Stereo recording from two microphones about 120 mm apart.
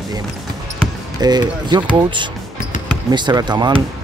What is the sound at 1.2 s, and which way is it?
Speech, 35° right (ahead or behind).